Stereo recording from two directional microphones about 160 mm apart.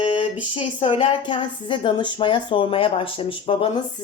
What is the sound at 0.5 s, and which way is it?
A woman's voice, 35° left (ahead or behind).